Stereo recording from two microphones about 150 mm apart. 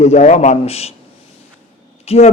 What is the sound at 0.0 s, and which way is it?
Speech, 50° left (ahead or behind).